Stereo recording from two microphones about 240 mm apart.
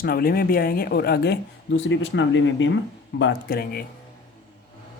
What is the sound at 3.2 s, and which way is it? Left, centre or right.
Speech, left.